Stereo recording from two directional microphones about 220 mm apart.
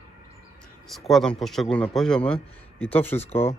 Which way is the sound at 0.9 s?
Centre (ahead or behind).